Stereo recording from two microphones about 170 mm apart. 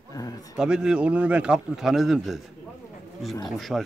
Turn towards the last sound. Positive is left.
turn(degrees=0)  # may be behind; listen again after turning